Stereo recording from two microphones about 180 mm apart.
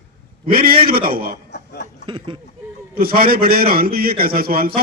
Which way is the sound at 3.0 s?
55° right (ahead or behind).